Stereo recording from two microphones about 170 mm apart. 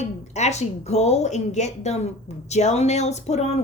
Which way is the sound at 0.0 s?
40° left (ahead or behind).